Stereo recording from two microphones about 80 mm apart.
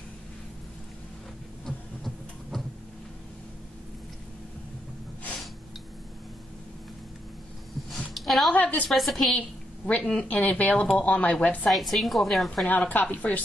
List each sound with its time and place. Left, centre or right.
1.7 s a sound: centre
8.1 s a sound: centre
8.5 s a woman's voice: centre
8.8 s a woman's voice: centre
9.8 s speech: centre
11.7 s a woman's voice: centre
12.6 s a woman's voice: left